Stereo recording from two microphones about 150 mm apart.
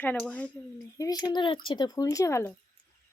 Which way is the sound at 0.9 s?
25° left (ahead or behind).